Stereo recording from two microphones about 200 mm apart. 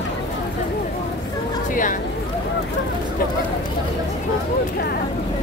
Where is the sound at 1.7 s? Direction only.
40° left (ahead or behind).